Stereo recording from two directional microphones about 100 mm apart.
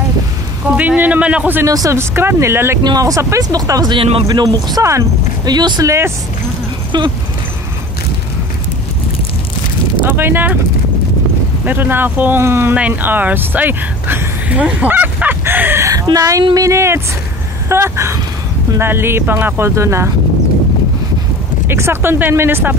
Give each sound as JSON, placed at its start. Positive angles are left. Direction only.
{"t": 0.7, "sound": "a man's voice", "side_deg": -15}
{"t": 1.7, "sound": "speech", "side_deg": -35}
{"t": 2.8, "sound": "speech", "side_deg": -40}
{"t": 3.9, "sound": "speech", "side_deg": -65}
{"t": 4.3, "sound": "speech", "side_deg": -45}
{"t": 10.0, "sound": "speech", "side_deg": -20}
{"t": 11.6, "sound": "speech", "side_deg": -20}
{"t": 15.9, "sound": "speech", "side_deg": -35}
{"t": 21.6, "sound": "speech", "side_deg": -25}